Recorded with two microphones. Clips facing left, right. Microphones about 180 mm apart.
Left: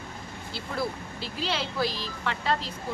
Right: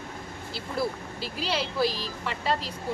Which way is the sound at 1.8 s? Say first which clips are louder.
Right 3 dB; 35° right (ahead or behind).